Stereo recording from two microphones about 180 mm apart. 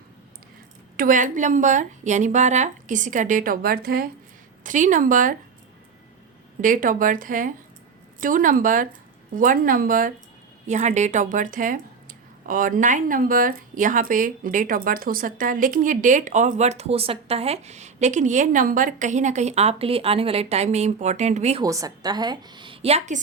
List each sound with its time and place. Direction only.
0.9 s speech: 50° right (ahead or behind)
6.6 s speech: 50° right (ahead or behind)
21.6 s a woman's voice: 20° right (ahead or behind); by 23.2 s 40° right (ahead or behind)